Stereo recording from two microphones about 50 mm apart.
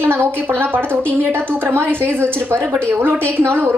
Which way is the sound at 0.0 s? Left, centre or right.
Right.